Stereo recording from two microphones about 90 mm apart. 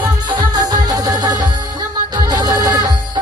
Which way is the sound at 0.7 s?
45° right (ahead or behind).